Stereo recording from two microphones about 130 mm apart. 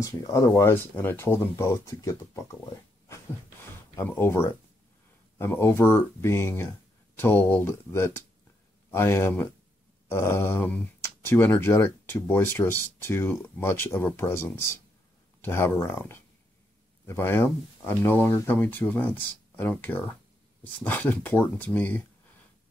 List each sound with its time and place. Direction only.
0.0 s speech: 25° left (ahead or behind)
3.9 s speech: 15° left (ahead or behind)